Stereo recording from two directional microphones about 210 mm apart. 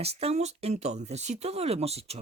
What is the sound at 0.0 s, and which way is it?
Speech, 30° right (ahead or behind).